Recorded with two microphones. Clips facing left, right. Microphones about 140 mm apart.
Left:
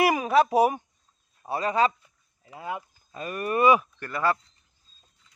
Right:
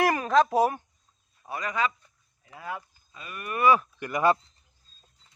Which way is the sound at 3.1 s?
45° left (ahead or behind).